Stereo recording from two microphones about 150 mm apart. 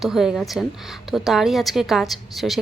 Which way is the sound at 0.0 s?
Centre (ahead or behind).